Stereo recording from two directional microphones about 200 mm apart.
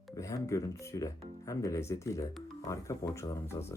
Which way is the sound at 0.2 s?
15° left (ahead or behind).